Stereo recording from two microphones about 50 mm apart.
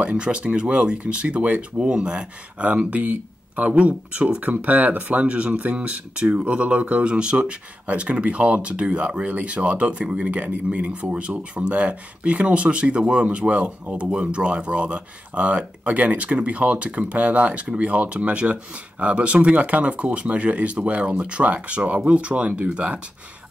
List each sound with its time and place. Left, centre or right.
0.1 s speech: right